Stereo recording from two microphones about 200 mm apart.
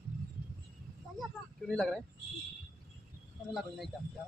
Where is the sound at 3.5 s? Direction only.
Centre (ahead or behind).